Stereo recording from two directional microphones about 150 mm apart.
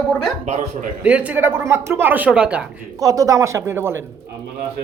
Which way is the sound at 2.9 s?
25° right (ahead or behind).